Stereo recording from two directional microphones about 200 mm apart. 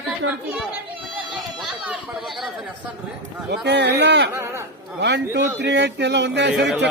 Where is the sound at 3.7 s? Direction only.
60° right (ahead or behind).